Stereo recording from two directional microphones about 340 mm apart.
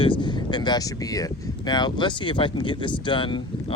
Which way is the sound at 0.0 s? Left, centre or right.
Centre.